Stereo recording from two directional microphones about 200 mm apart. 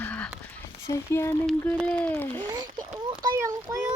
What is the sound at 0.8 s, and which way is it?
Speech, 15° left (ahead or behind).